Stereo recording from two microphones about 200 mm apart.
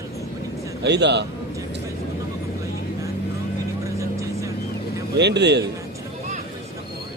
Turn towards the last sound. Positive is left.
turn(degrees=-60)  # may be behind; listen again after turning